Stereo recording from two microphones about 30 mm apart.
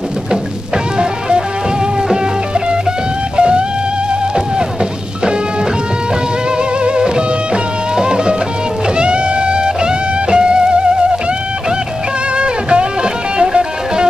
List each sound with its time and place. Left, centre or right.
3.3 s music: right
7.0 s music: right
12.4 s music: right